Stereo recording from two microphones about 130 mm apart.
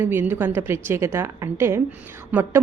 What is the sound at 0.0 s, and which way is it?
A woman's voice, 15° right (ahead or behind).